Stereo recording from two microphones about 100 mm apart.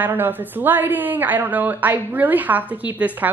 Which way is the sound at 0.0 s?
20° right (ahead or behind).